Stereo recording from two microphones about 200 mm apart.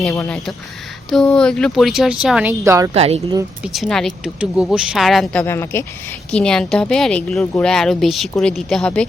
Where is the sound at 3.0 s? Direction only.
30° right (ahead or behind).